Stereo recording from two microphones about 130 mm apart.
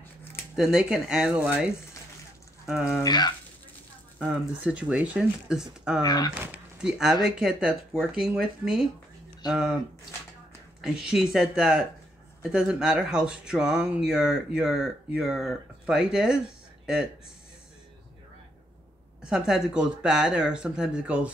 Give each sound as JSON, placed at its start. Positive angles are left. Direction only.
{"t": 0.6, "sound": "speech", "side_deg": -5}
{"t": 3.0, "sound": "speech", "side_deg": 30}
{"t": 4.2, "sound": "speech", "side_deg": -10}
{"t": 6.0, "sound": "speech", "side_deg": 30}
{"t": 6.8, "sound": "speech", "side_deg": -5}
{"t": 10.8, "sound": "speech", "side_deg": -5}
{"t": 19.2, "sound": "speech", "side_deg": -5}